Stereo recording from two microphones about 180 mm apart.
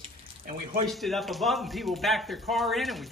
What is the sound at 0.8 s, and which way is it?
Speech, centre (ahead or behind).